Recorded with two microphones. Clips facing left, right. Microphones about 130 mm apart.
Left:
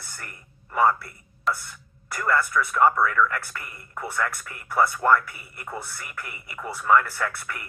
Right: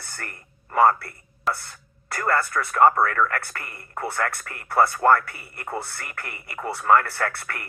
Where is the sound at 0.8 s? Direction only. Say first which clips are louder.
Right 3 dB; 55° right (ahead or behind).